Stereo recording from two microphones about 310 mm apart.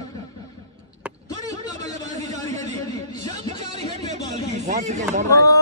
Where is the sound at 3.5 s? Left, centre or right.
Right.